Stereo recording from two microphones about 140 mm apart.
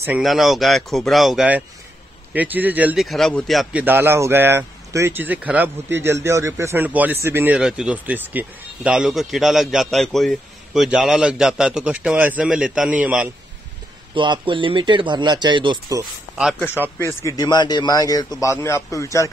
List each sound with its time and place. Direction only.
0.2 s speech: centre (ahead or behind)
3.0 s speech: centre (ahead or behind)
3.8 s speech: 15° right (ahead or behind)
14.1 s speech: 35° right (ahead or behind)
17.0 s a man's voice: 20° left (ahead or behind)